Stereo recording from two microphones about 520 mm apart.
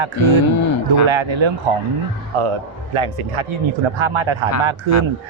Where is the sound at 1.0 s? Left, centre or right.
Right.